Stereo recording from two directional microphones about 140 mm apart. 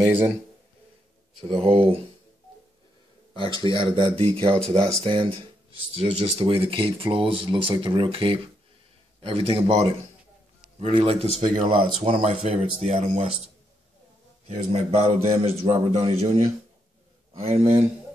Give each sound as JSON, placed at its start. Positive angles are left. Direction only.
{"t": 0.0, "sound": "speech", "side_deg": -10}
{"t": 1.4, "sound": "speech", "side_deg": -45}
{"t": 3.5, "sound": "speech", "side_deg": -35}
{"t": 4.5, "sound": "speech", "side_deg": 5}
{"t": 5.0, "sound": "speech", "side_deg": -40}
{"t": 14.5, "sound": "speech", "side_deg": -50}